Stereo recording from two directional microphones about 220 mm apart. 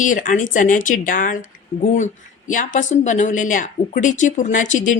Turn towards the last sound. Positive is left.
turn(degrees=35)  # may be behind; listen again after turning